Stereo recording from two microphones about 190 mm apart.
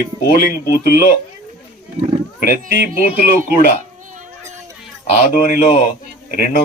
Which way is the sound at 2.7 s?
45° left (ahead or behind).